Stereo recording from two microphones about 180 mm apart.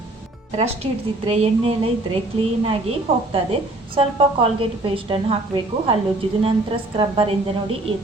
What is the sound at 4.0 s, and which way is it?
A woman's voice, 30° right (ahead or behind).